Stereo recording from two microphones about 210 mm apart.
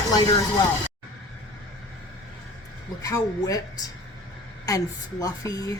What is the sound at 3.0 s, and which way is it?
Speech, 15° left (ahead or behind).